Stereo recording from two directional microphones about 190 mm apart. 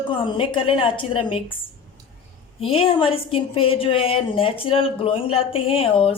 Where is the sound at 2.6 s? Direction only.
30° left (ahead or behind).